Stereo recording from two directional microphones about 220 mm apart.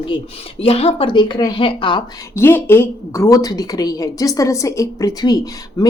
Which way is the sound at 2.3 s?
10° left (ahead or behind).